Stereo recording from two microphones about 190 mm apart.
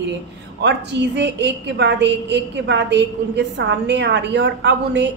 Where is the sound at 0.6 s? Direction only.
65° right (ahead or behind).